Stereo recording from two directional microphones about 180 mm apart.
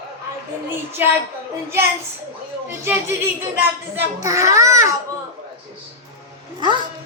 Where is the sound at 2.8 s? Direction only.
15° right (ahead or behind).